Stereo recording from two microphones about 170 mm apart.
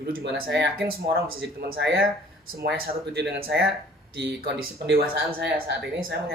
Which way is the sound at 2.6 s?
80° right.